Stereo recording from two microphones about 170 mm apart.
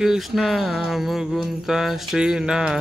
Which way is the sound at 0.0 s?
Centre (ahead or behind).